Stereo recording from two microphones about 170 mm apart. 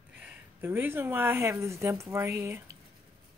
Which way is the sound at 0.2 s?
15° right (ahead or behind).